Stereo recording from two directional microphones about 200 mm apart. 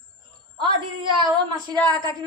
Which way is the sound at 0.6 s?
20° right (ahead or behind).